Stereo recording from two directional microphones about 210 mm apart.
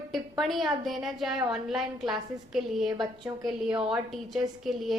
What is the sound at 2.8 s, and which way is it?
Speech, 20° right (ahead or behind).